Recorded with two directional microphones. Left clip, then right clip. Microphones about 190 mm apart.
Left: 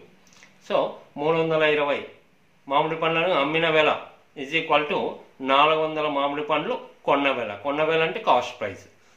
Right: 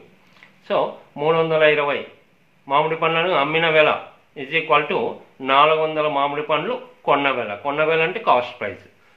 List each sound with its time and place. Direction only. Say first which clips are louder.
0.7 s a man's voice: right 3 dB; 5° right (ahead or behind)